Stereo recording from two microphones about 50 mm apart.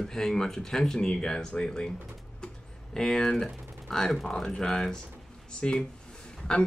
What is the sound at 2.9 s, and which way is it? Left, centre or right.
Speech, centre.